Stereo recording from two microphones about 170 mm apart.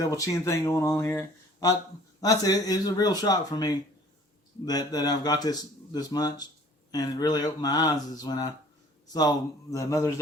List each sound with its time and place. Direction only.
0.0 s speech: 20° left (ahead or behind)
2.2 s speech: 20° left (ahead or behind)